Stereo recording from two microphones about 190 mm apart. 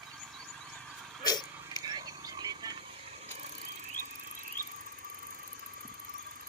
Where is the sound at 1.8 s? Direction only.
20° right (ahead or behind).